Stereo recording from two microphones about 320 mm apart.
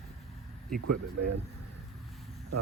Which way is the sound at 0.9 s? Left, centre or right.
Right.